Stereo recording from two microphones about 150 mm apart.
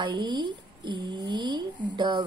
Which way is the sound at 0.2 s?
30° right (ahead or behind).